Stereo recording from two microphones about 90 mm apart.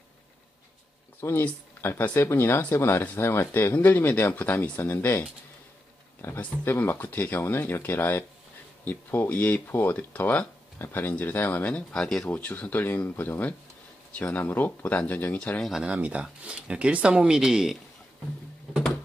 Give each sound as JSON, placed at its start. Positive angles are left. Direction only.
{"t": 1.2, "sound": "speech", "side_deg": 25}
{"t": 6.2, "sound": "speech", "side_deg": 25}
{"t": 15.6, "sound": "speech", "side_deg": -5}